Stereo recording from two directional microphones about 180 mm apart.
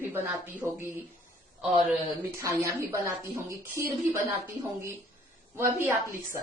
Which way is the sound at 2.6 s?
15° right (ahead or behind).